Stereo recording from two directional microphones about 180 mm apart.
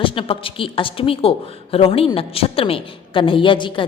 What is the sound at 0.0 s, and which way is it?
A woman's voice, 30° left (ahead or behind).